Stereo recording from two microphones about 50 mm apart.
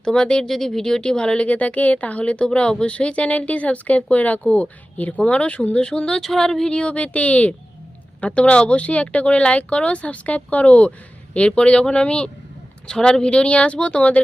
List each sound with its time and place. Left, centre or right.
0.0 s speech: centre
1.5 s speech: left; by 6.7 s centre
6.7 s speech: left